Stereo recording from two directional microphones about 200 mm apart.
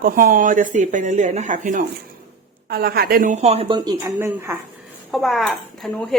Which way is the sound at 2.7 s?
50° right (ahead or behind).